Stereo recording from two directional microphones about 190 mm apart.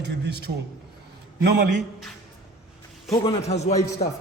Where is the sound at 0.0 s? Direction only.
60° right (ahead or behind).